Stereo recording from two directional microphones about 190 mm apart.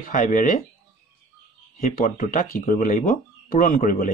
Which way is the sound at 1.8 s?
45° left (ahead or behind).